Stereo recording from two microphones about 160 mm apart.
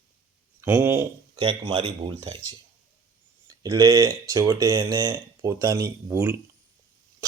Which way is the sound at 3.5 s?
20° right (ahead or behind).